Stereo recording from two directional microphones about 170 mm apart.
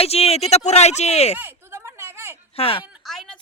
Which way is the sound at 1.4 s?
10° right (ahead or behind).